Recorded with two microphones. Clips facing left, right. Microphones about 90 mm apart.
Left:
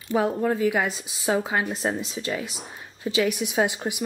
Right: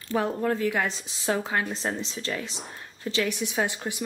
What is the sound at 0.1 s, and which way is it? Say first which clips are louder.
A woman's voice: left 3 dB; 10° left (ahead or behind).